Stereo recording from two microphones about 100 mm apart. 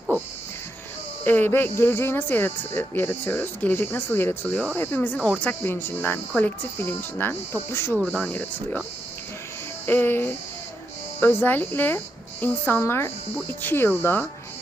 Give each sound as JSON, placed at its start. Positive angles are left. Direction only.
{"t": 1.2, "sound": "speech", "side_deg": 20}
{"t": 7.9, "sound": "speech", "side_deg": 5}
{"t": 9.8, "sound": "speech", "side_deg": 20}